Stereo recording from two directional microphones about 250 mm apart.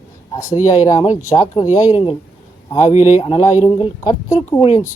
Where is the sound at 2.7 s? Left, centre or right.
Left.